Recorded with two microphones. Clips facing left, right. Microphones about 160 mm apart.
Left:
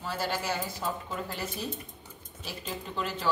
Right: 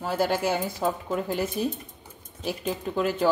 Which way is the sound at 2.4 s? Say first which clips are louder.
Right 9 dB; 50° right (ahead or behind).